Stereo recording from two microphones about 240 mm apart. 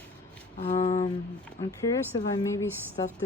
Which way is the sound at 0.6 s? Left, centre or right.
Left.